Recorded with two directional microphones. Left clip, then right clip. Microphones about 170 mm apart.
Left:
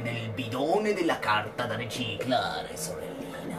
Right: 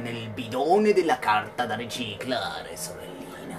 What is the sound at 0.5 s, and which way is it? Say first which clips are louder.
Speech: right 6 dB; 60° right (ahead or behind).